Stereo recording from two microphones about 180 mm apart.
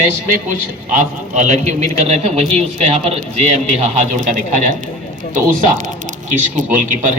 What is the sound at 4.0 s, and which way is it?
Speech, 45° right (ahead or behind).